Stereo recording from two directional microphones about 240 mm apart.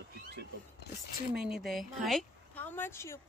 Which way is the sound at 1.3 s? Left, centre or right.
Centre.